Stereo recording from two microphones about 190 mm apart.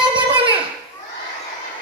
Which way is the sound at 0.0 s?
25° right (ahead or behind).